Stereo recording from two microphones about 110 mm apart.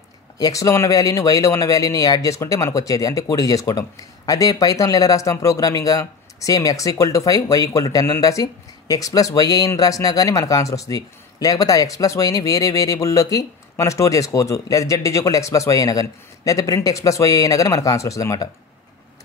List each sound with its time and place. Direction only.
0.4 s speech: 30° left (ahead or behind)